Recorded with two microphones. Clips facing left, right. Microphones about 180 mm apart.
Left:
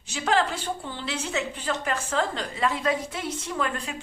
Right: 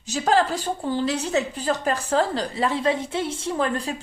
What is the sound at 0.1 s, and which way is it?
A woman's voice, 35° right (ahead or behind).